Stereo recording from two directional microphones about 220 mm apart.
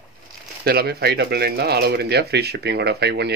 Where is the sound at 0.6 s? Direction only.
45° right (ahead or behind).